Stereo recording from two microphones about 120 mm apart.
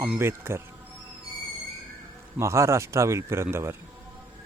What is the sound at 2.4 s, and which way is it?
Speech, 25° right (ahead or behind).